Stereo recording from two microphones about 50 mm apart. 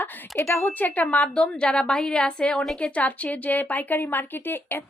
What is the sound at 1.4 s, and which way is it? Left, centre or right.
A woman's voice, centre.